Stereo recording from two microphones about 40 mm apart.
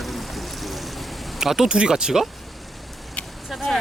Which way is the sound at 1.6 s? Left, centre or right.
Right.